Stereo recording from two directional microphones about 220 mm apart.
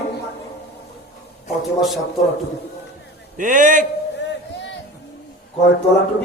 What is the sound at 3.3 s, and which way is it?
Speech, 35° right (ahead or behind).